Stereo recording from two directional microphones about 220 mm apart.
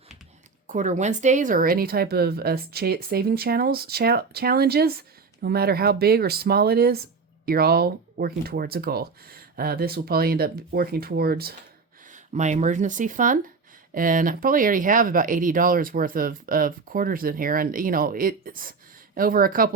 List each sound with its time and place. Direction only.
0.7 s speech: 35° right (ahead or behind)
12.0 s speech: 35° right (ahead or behind)